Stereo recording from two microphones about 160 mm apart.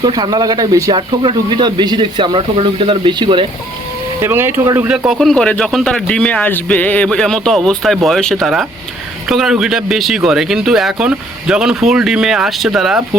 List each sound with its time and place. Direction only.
0.0 s speech: 25° right (ahead or behind)
4.2 s speech: 15° right (ahead or behind)
4.9 s speech: centre (ahead or behind)